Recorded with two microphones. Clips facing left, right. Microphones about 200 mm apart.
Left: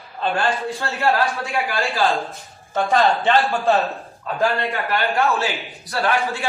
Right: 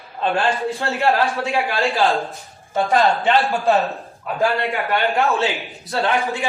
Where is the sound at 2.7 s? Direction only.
10° right (ahead or behind).